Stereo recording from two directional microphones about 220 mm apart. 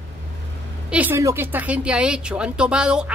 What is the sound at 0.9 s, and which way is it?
Speech, 10° right (ahead or behind).